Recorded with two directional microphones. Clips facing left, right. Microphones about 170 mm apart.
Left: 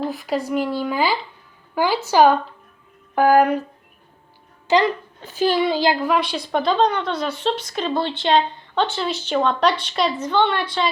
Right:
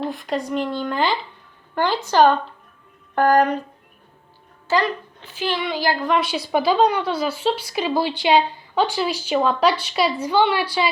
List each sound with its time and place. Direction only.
0.0 s a woman's voice: centre (ahead or behind)
4.7 s a child's voice: 20° left (ahead or behind)
5.2 s a woman's voice: 40° left (ahead or behind)
5.9 s a woman's voice: 10° left (ahead or behind)
6.1 s speech: 5° right (ahead or behind)